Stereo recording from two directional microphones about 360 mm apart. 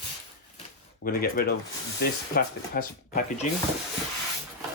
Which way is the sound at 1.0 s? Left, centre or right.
Left.